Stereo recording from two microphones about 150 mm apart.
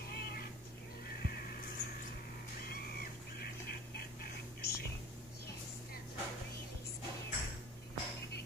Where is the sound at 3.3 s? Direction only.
90° left.